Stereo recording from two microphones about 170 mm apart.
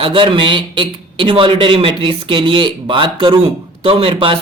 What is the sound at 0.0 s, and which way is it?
Speech, 30° right (ahead or behind).